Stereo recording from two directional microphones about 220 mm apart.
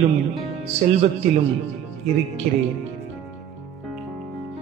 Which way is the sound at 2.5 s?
35° right (ahead or behind).